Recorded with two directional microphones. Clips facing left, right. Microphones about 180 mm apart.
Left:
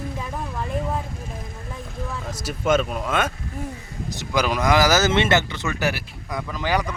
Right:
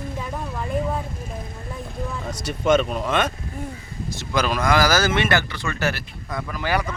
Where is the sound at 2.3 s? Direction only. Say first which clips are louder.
Right 2 dB; 5° left (ahead or behind).